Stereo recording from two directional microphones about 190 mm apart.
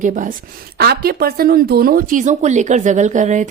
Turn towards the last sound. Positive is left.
turn(degrees=-40)  # may be behind; listen again after turning